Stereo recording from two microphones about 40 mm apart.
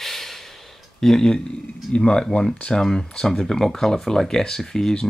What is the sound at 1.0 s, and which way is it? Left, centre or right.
Speech, centre.